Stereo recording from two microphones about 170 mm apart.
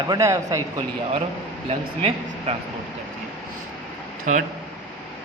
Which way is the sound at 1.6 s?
35° right (ahead or behind).